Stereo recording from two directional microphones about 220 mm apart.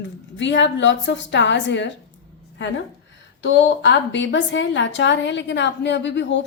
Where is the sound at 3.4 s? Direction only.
55° left (ahead or behind).